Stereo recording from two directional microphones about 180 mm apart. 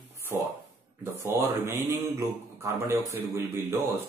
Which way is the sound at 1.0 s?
15° right (ahead or behind).